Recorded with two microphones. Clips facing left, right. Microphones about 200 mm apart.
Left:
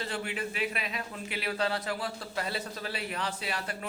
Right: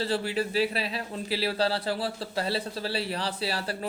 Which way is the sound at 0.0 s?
35° right (ahead or behind).